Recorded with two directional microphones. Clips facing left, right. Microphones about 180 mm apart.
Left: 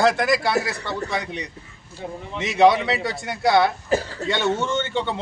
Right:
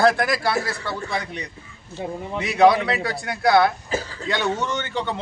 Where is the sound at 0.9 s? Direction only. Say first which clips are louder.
Left 1 dB; 20° left (ahead or behind).